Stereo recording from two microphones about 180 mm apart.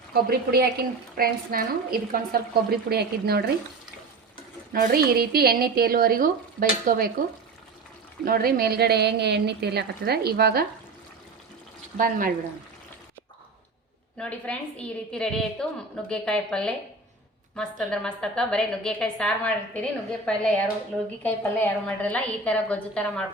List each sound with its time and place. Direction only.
0.1 s speech: 60° right (ahead or behind)
4.7 s speech: 50° right (ahead or behind)
8.2 s speech: 55° right (ahead or behind)
11.9 s speech: 50° right (ahead or behind)
14.2 s a woman's voice: 5° left (ahead or behind)